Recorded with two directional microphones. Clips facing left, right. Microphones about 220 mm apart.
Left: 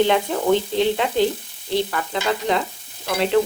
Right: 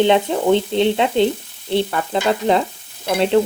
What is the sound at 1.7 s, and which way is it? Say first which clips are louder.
Stir: right 4 dB; 30° right (ahead or behind).